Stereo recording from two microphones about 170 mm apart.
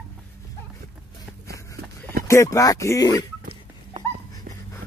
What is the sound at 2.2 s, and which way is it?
Speech, 15° left (ahead or behind).